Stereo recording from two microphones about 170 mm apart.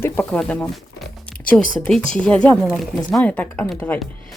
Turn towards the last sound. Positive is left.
turn(degrees=5)  # may be behind; listen again after turning